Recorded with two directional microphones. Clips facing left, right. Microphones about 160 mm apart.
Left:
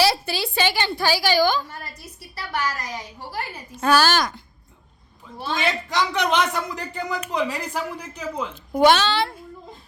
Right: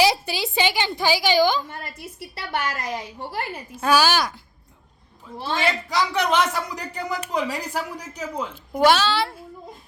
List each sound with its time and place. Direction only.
0.0 s a woman's voice: 15° right (ahead or behind)
3.8 s speech: 10° right (ahead or behind)
5.9 s speech: 5° right (ahead or behind)